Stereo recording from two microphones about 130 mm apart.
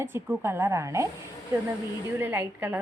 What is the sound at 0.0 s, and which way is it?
Speech, 20° right (ahead or behind).